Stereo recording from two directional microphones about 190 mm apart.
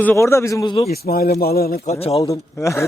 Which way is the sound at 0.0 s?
10° left (ahead or behind).